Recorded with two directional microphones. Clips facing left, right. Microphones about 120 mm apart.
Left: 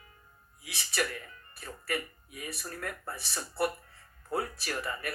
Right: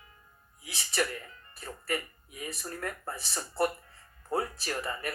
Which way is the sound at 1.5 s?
30° right (ahead or behind).